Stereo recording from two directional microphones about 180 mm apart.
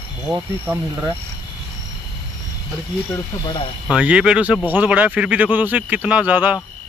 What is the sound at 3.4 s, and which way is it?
Speech, 30° left (ahead or behind).